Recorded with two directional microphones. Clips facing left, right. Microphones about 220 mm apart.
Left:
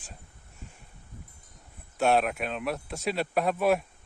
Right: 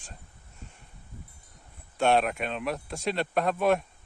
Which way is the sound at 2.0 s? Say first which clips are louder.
Even; 5° left (ahead or behind).